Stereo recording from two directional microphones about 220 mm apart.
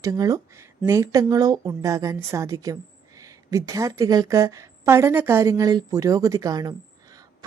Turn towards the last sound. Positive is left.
turn(degrees=-15)  # may be behind; listen again after turning